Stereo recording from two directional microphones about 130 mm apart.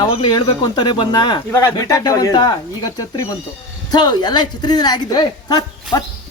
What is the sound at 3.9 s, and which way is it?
A woman's voice, 35° left (ahead or behind).